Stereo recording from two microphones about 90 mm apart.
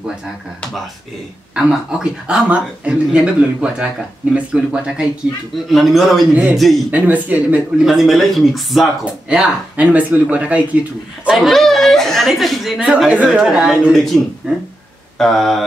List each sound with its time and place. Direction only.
1.5 s speech: 10° right (ahead or behind)
6.9 s speech: 15° right (ahead or behind)
7.8 s speech: centre (ahead or behind)
9.3 s speech: 15° right (ahead or behind)
11.3 s speech: centre (ahead or behind)
13.1 s speech: 15° right (ahead or behind)
15.1 s speech: 5° left (ahead or behind)